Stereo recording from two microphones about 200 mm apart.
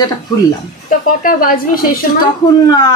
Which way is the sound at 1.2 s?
45° left (ahead or behind).